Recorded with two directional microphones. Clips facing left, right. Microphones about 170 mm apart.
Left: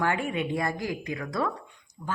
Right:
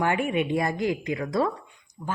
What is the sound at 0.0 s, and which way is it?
A woman's voice, 20° right (ahead or behind).